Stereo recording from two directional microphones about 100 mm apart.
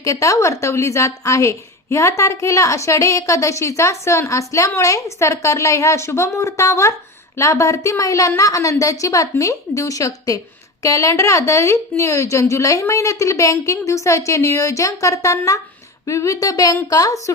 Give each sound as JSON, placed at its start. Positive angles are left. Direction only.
{"t": 0.0, "sound": "speech", "side_deg": 35}